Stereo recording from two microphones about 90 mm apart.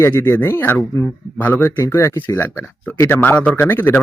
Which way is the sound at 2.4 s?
20° left (ahead or behind).